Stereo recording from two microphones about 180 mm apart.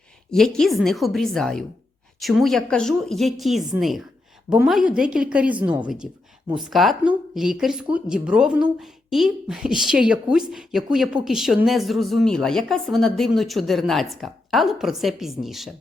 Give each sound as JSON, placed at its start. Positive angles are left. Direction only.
{"t": 0.3, "sound": "speech", "side_deg": 5}